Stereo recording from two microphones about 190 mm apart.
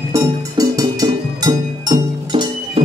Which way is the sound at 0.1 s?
20° right (ahead or behind).